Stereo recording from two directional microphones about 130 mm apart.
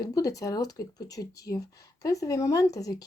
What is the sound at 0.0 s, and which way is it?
Speech, 25° left (ahead or behind).